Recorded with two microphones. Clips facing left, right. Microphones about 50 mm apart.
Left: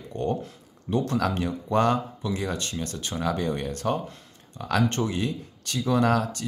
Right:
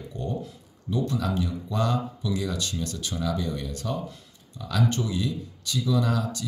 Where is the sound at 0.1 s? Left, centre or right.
Left.